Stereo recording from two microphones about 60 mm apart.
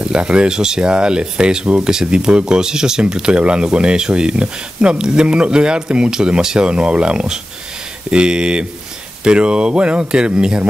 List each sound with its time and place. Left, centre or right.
0.0 s speech: centre